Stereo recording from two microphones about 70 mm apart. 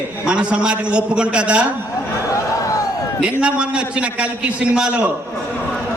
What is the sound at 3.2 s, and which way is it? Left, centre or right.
A man's voice, centre.